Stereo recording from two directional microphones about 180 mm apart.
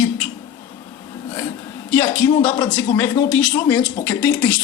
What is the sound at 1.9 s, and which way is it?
Speech, 10° left (ahead or behind).